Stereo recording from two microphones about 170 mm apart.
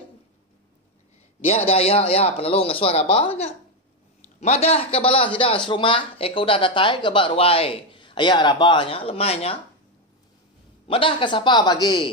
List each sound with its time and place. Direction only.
1.7 s speech: 35° left (ahead or behind)
10.9 s speech: 30° left (ahead or behind)